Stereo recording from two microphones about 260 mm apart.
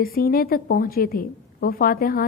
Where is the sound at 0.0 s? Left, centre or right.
Left.